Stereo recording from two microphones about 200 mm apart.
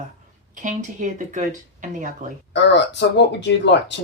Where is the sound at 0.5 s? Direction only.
40° right (ahead or behind).